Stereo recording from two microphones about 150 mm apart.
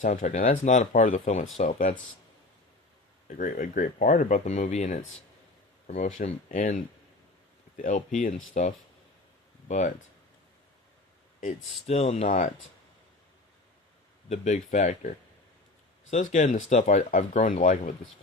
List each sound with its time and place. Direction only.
0.0 s speech: 55° left (ahead or behind)
3.2 s speech: 65° left (ahead or behind)
6.2 s speech: 60° left (ahead or behind)
7.8 s speech: 60° left (ahead or behind)
11.3 s speech: 50° left (ahead or behind)
14.3 s speech: 50° left (ahead or behind)